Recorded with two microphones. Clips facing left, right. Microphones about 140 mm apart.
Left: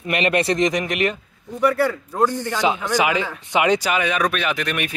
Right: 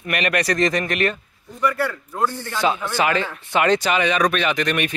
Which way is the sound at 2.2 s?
15° left (ahead or behind).